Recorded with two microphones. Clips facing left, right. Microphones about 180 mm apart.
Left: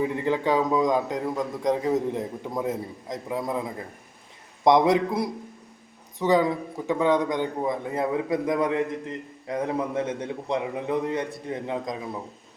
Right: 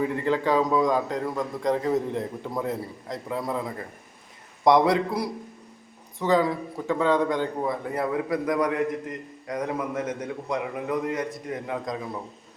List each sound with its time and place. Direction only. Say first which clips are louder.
0.0 s a man's voice: even; 15° left (ahead or behind)
4.6 s a man's voice: left 1 dB; 20° left (ahead or behind)